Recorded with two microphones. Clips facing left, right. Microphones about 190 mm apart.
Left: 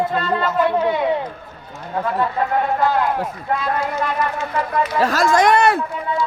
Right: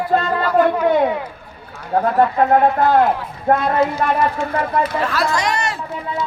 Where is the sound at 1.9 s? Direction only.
55° right (ahead or behind).